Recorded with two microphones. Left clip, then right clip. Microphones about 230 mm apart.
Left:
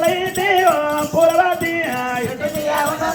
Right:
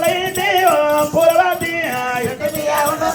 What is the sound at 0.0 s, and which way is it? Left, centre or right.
Music, right.